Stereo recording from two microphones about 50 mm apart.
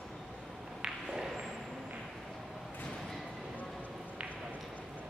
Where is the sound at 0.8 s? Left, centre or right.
Centre.